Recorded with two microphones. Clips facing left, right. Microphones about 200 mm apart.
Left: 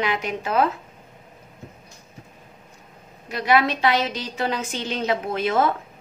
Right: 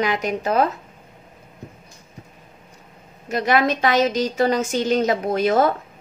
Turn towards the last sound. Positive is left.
turn(degrees=-40)  # may be behind; listen again after turning